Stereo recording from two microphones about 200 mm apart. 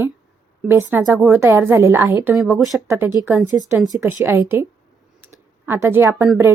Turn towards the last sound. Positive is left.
turn(degrees=-10)  # may be behind; listen again after turning